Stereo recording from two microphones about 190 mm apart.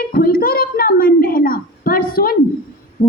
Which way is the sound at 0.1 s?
50° left (ahead or behind).